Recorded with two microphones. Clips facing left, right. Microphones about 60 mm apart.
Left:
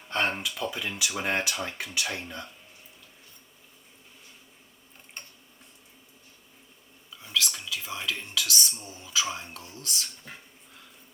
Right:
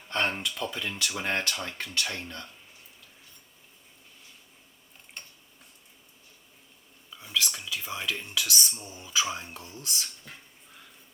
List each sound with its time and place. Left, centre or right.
0.1 s speech: centre
7.3 s whispering: centre
7.9 s speech: centre
8.4 s speech: right
9.4 s speech: centre